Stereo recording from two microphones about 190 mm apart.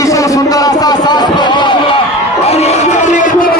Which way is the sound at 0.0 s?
15° left (ahead or behind).